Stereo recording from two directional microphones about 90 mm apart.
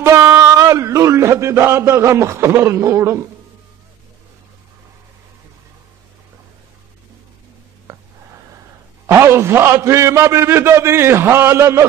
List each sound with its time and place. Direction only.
0.0 s a man's voice: 35° right (ahead or behind)
9.0 s a man's voice: 30° right (ahead or behind)